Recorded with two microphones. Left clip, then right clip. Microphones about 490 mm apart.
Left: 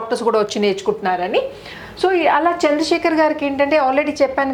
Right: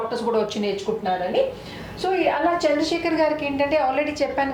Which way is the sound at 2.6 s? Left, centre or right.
Left.